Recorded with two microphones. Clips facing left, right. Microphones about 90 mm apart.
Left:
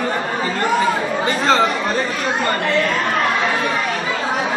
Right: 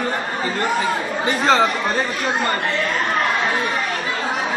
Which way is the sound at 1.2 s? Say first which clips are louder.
Even; 10° right (ahead or behind).